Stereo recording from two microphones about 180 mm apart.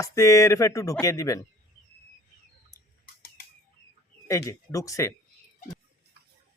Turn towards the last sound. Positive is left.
turn(degrees=15)  # may be behind; listen again after turning